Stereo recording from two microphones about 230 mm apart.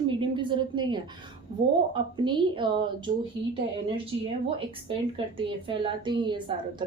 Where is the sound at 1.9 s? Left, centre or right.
Centre.